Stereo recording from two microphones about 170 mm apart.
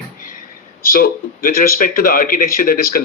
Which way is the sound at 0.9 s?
60° left (ahead or behind).